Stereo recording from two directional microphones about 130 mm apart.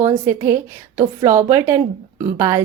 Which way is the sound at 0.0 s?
20° right (ahead or behind).